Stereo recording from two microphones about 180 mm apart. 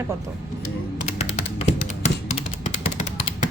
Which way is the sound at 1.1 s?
40° left (ahead or behind).